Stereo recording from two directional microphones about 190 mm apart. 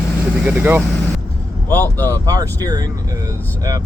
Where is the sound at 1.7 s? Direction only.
10° left (ahead or behind).